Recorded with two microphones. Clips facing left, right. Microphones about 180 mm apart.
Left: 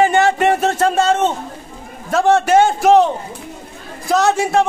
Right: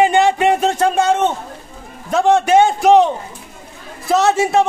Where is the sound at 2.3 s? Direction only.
15° right (ahead or behind).